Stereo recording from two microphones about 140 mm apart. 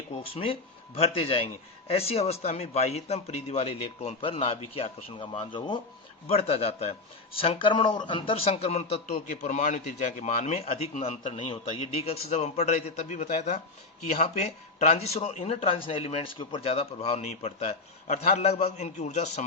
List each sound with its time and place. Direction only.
0.1 s speech: 45° left (ahead or behind)
6.2 s a man's voice: 45° left (ahead or behind)